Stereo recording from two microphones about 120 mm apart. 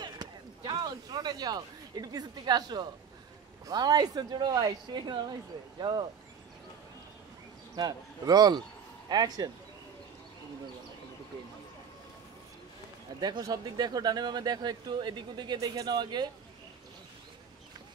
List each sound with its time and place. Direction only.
0.0 s a sound: 35° right (ahead or behind)
3.6 s speech: 35° right (ahead or behind)
7.7 s speech: 30° right (ahead or behind)
13.2 s speech: 35° right (ahead or behind)